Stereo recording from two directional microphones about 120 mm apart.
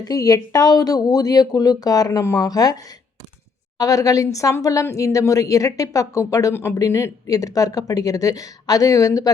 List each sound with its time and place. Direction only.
0.0 s a woman's voice: 30° left (ahead or behind)
3.8 s a woman's voice: 30° left (ahead or behind)